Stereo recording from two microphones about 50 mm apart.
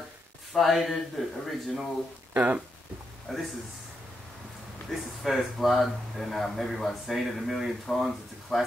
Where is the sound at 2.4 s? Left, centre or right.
Right.